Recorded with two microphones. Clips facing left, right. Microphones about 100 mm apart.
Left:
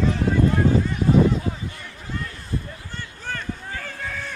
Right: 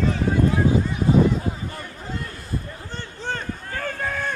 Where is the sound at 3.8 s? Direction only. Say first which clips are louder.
Right 5 dB; 50° right (ahead or behind).